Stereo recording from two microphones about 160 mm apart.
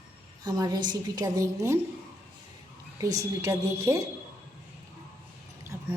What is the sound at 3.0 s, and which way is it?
A woman's voice, 20° right (ahead or behind).